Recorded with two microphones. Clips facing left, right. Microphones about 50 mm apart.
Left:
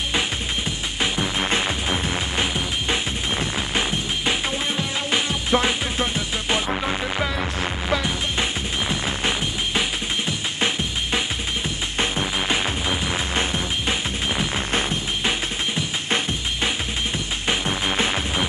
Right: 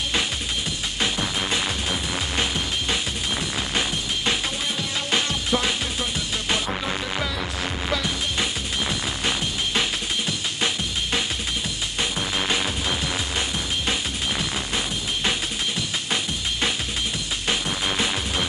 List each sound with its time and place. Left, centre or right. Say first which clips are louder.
0.7 s music: even; left
12.4 s music: even; centre
14.7 s music: left 4 dB; left
17.5 s music: left 2 dB; left